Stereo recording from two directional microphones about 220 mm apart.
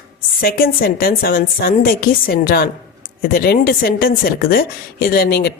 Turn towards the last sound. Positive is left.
turn(degrees=45)  # may be behind; listen again after turning